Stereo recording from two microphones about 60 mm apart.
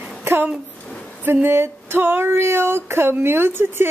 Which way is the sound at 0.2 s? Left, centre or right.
Right.